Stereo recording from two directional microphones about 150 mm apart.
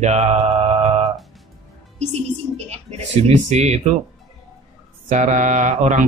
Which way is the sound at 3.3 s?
50° right (ahead or behind).